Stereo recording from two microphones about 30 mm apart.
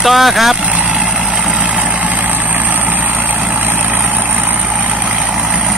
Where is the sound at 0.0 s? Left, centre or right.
Centre.